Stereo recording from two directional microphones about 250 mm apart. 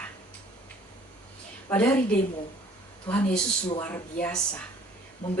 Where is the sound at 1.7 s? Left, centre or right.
Centre.